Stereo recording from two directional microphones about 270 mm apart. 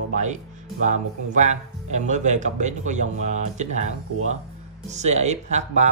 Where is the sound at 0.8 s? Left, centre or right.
Right.